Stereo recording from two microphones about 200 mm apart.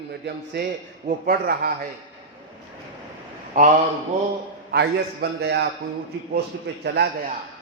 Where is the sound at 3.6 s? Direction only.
40° right (ahead or behind).